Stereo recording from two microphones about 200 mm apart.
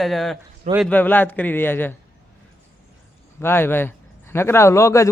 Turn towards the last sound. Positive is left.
turn(degrees=15)  # may be behind; listen again after turning